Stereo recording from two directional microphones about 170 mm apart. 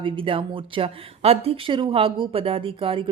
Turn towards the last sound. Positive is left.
turn(degrees=-30)  # may be behind; listen again after turning